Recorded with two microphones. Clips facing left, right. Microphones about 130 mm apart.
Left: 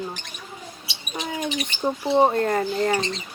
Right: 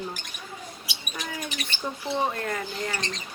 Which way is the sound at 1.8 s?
40° left (ahead or behind).